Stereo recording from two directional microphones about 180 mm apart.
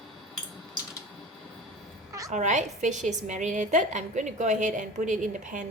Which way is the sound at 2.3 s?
40° right (ahead or behind).